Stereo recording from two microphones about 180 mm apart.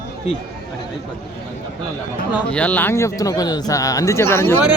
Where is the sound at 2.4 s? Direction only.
5° left (ahead or behind).